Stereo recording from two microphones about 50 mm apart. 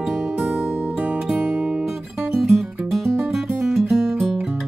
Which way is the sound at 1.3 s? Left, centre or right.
Centre.